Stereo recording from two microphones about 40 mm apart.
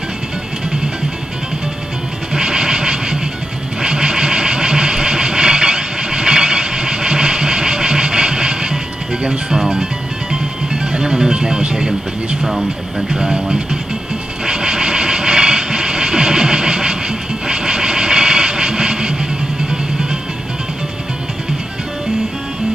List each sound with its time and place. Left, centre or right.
2.3 s music: centre
3.8 s vehicle: centre
9.2 s speech: right
10.3 s music: right
13.1 s speech: centre
14.4 s vehicle: centre
19.7 s music: centre